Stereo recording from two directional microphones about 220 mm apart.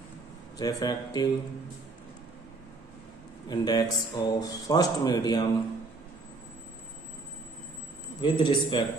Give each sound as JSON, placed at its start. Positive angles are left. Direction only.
{"t": 0.6, "sound": "a man's voice", "side_deg": 15}
{"t": 3.4, "sound": "a man's voice", "side_deg": 15}
{"t": 8.2, "sound": "a man's voice", "side_deg": 20}